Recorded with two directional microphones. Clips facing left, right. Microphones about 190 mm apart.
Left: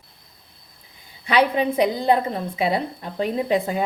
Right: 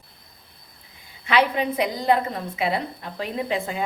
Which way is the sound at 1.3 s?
30° left (ahead or behind).